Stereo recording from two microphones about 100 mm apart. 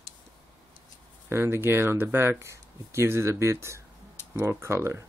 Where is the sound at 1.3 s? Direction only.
25° right (ahead or behind).